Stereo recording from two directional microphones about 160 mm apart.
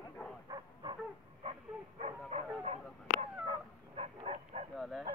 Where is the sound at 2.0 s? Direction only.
45° right (ahead or behind).